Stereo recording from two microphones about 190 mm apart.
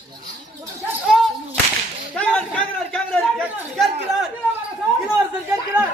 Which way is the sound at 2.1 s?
5° left (ahead or behind).